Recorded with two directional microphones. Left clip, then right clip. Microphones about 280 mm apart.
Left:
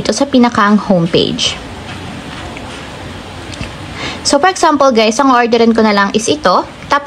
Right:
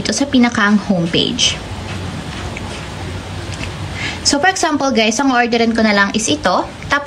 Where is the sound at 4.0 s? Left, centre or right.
Centre.